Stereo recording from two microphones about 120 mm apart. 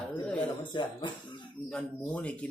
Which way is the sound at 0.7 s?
40° left (ahead or behind).